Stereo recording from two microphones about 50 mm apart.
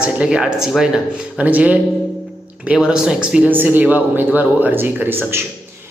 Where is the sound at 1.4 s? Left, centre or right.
Right.